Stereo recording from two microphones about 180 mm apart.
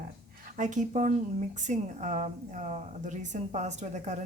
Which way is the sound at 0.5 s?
45° right (ahead or behind).